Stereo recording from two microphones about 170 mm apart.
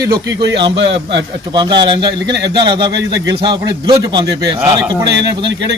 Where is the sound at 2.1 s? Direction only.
90° right.